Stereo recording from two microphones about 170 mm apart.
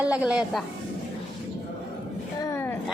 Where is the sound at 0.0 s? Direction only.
5° right (ahead or behind).